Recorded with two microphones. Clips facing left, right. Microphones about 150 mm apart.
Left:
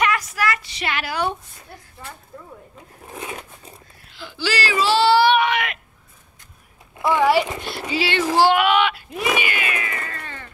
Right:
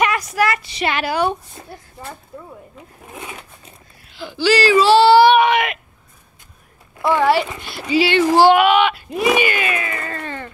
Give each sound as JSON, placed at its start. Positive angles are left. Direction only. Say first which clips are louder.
{"t": 0.0, "sound": "a woman's voice", "louder": "right 4 dB", "side_deg": -20}
{"t": 4.2, "sound": "speech", "louder": "right 8 dB", "side_deg": -20}
{"t": 4.9, "sound": "child singing", "louder": "right 4 dB", "side_deg": -20}
{"t": 7.0, "sound": "speech", "louder": "right 1 dB", "side_deg": 15}
{"t": 7.9, "sound": "speech", "louder": "right 6 dB", "side_deg": -15}
{"t": 9.4, "sound": "a sound", "louder": "right 6 dB", "side_deg": -35}